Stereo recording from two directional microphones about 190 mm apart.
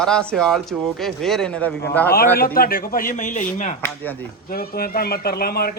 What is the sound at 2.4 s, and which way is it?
A man's voice, 50° left (ahead or behind).